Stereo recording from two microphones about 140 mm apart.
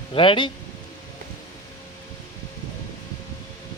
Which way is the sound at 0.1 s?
40° left (ahead or behind).